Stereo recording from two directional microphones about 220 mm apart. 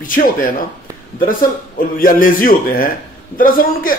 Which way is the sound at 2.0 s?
40° left (ahead or behind).